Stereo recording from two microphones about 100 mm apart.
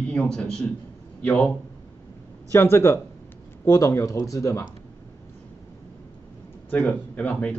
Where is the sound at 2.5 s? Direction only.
25° left (ahead or behind).